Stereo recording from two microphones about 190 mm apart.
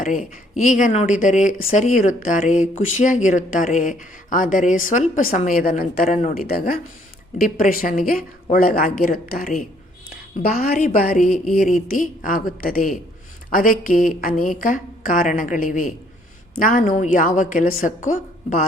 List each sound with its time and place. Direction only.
0.0 s a woman's voice: 40° left (ahead or behind)